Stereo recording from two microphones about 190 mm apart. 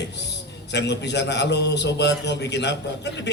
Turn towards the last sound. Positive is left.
turn(degrees=65)  # may be behind; listen again after turning